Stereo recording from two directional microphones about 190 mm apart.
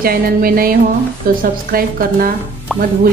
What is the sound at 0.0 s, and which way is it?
A woman's voice, 50° right (ahead or behind).